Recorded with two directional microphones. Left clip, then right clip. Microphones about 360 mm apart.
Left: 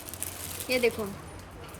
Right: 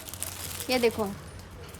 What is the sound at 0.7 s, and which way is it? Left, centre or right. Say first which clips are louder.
Speech: right 1 dB; right.